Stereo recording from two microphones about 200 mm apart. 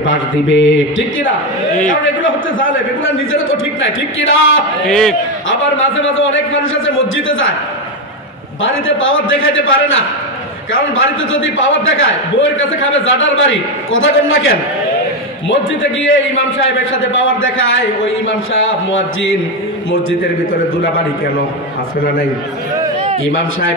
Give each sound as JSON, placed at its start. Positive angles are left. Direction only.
{"t": 0.5, "sound": "mantra", "side_deg": 65}
{"t": 4.2, "sound": "a man's voice", "side_deg": 75}
{"t": 4.8, "sound": "a man's voice", "side_deg": 5}
{"t": 5.5, "sound": "a man's voice", "side_deg": 75}
{"t": 8.6, "sound": "a man's voice", "side_deg": 75}
{"t": 23.2, "sound": "a man's voice", "side_deg": 70}